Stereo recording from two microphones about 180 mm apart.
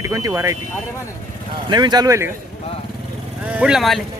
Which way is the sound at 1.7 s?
25° right (ahead or behind).